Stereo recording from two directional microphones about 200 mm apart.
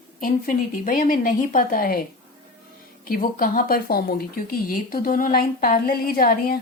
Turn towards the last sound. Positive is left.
turn(degrees=45)  # may be behind; listen again after turning